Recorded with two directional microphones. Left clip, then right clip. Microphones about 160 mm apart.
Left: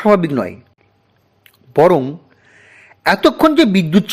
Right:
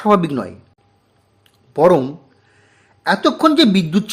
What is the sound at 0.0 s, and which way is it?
Speech, 20° left (ahead or behind).